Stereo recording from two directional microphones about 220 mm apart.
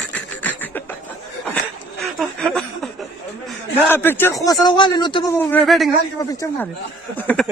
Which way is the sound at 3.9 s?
10° left (ahead or behind).